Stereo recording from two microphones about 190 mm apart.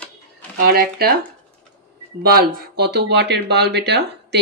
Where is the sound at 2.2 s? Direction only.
55° right (ahead or behind).